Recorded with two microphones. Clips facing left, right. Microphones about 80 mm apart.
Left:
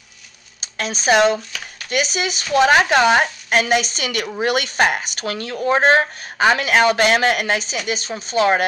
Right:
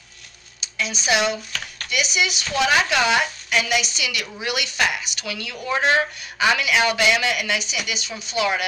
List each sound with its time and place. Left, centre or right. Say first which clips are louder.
0.6 s a woman's voice: left 2 dB; left